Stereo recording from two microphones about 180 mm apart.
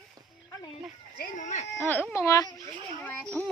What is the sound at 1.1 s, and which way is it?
Speech, 50° left (ahead or behind).